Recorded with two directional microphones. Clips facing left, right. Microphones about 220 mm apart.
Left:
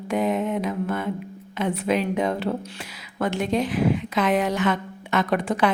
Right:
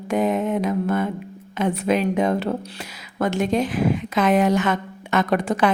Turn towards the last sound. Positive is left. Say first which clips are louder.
# right 2 dB
turn(degrees=-45)  # may be behind; listen again after turning